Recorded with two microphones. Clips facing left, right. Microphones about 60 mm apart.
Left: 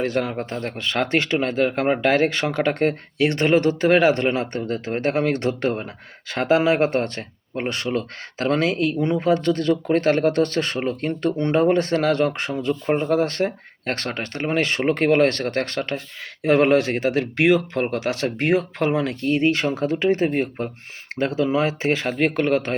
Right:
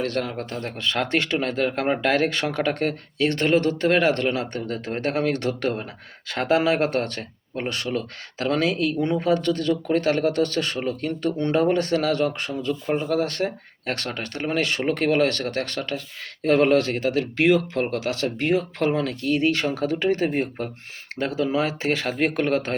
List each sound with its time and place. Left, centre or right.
0.0 s speech: centre
0.5 s speech: left
3.2 s speech: centre
4.2 s speech: left
9.0 s speech: centre
9.2 s speech: left
16.4 s speech: centre
18.3 s speech: left
18.8 s speech: centre
19.2 s speech: left
22.1 s speech: centre